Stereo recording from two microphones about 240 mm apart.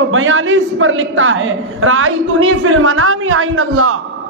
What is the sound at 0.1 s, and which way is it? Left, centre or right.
A man's voice, right.